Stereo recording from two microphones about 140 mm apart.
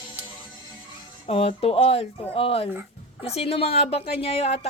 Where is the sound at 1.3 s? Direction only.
45° left (ahead or behind).